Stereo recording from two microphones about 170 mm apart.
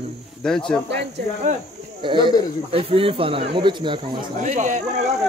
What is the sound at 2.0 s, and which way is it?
Speech, 30° right (ahead or behind).